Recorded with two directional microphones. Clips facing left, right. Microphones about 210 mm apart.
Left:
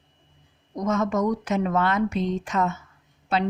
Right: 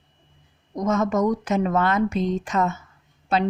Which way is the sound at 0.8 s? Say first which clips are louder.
Right 2 dB; 45° right (ahead or behind).